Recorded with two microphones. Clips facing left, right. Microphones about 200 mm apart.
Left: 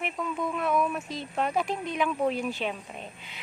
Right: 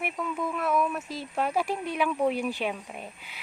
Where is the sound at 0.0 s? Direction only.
5° right (ahead or behind).